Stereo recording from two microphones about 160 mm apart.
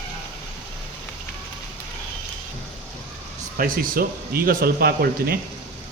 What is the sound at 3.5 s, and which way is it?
A man's voice, 65° right (ahead or behind).